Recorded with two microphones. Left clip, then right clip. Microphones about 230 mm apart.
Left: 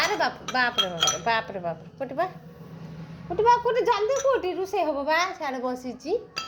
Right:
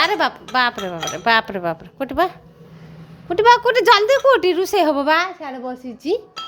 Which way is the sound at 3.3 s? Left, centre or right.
Right.